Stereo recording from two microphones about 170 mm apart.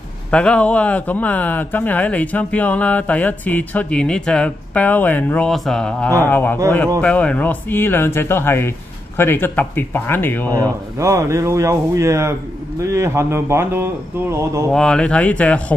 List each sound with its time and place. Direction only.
0.3 s speech: 5° left (ahead or behind)
10.5 s speech: 20° right (ahead or behind)
14.7 s speech: 5° left (ahead or behind)